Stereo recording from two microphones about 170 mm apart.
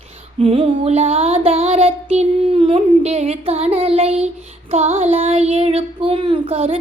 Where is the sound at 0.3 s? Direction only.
30° right (ahead or behind).